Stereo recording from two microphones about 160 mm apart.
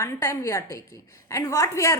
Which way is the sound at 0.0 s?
15° left (ahead or behind).